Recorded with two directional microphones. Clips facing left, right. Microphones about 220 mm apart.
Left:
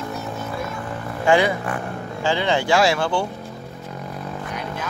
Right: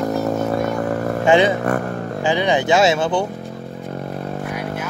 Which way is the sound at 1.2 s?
20° right (ahead or behind).